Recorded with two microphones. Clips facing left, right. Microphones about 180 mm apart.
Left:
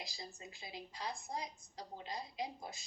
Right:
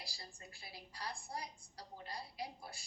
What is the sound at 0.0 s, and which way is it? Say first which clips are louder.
Speech: left 5 dB; 20° left (ahead or behind).